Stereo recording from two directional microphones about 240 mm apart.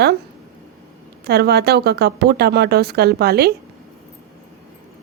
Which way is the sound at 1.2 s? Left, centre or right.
Right.